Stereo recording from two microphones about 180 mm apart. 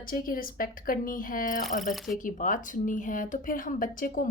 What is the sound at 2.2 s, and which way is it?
Speech, 45° left (ahead or behind).